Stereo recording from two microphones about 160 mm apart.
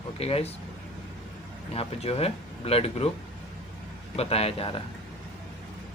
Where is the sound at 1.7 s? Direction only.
35° left (ahead or behind).